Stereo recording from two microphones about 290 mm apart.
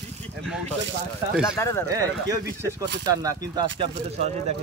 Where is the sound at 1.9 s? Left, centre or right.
Centre.